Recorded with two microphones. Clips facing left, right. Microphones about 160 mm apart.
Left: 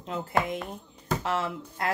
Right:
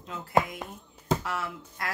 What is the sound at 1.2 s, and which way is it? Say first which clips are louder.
Speech: left 5 dB; 25° left (ahead or behind).